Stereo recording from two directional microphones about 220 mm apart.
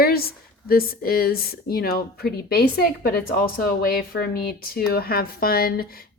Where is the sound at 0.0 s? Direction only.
45° left (ahead or behind).